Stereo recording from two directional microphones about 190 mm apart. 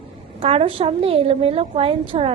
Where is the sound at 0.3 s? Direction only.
30° right (ahead or behind).